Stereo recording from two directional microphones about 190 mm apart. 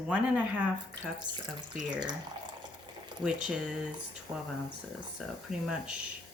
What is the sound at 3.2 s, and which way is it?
Speech, 5° right (ahead or behind).